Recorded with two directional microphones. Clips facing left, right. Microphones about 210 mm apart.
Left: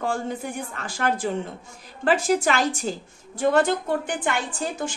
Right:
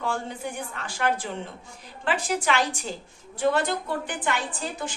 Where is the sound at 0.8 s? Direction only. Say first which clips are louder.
Left 3 dB; 45° left (ahead or behind).